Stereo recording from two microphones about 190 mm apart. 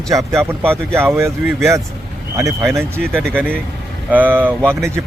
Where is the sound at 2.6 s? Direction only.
15° right (ahead or behind).